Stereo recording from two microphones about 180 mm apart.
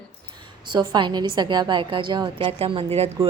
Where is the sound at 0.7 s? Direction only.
25° right (ahead or behind).